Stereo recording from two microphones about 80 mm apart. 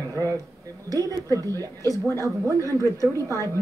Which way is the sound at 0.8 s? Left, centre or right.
Right.